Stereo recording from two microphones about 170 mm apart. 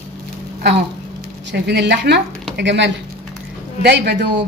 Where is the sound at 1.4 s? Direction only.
80° right.